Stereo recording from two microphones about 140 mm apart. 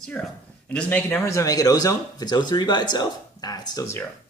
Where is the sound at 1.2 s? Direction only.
25° left (ahead or behind).